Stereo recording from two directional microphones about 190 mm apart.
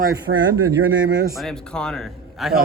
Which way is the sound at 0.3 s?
60° right (ahead or behind).